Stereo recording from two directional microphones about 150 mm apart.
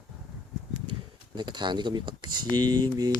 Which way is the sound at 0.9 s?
30° right (ahead or behind).